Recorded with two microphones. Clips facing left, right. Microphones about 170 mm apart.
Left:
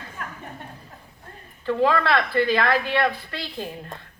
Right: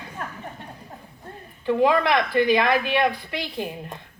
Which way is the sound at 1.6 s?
15° right (ahead or behind).